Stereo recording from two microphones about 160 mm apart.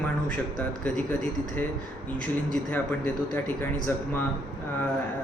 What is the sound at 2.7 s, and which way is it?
Speech, 10° left (ahead or behind).